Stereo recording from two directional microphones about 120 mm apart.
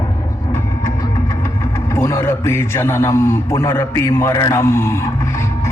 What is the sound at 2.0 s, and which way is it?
A man's voice, 20° left (ahead or behind).